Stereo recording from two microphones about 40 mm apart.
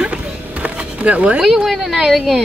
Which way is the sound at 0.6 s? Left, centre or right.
Right.